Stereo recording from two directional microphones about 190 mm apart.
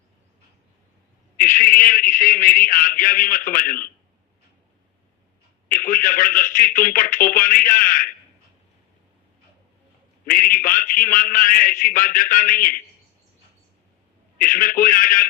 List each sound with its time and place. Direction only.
1.4 s a man's voice: 45° left (ahead or behind)
5.6 s a man's voice: 50° left (ahead or behind)
10.2 s a man's voice: 50° left (ahead or behind)
14.3 s a man's voice: 45° left (ahead or behind)